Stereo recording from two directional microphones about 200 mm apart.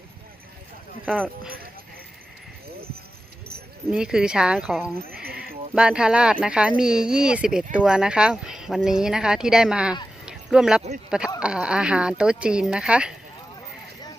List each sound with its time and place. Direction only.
1.0 s speech: 5° left (ahead or behind)
3.9 s speech: 5° right (ahead or behind)
4.9 s a sound: 50° right (ahead or behind)
5.7 s speech: 5° right (ahead or behind)
10.2 s a sound: 5° right (ahead or behind)
11.3 s speech: 5° right (ahead or behind)